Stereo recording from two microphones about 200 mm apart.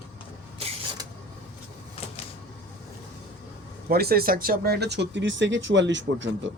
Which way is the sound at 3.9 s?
50° right (ahead or behind).